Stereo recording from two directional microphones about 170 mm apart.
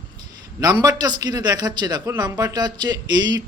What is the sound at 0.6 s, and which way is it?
A man's voice, 20° right (ahead or behind).